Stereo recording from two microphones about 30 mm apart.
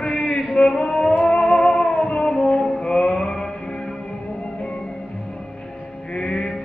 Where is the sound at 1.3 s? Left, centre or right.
Left.